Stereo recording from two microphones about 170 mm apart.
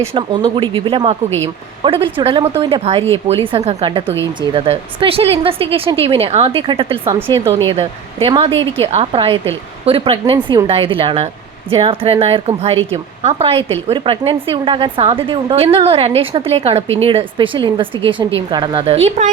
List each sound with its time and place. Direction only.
0.1 s a woman's voice: 30° right (ahead or behind)
7.1 s speech: 20° right (ahead or behind)
7.7 s a woman's voice: 35° right (ahead or behind)